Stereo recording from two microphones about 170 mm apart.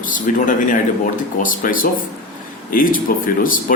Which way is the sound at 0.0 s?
50° left (ahead or behind).